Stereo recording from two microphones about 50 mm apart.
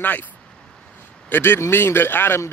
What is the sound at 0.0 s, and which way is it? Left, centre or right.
Speech, left.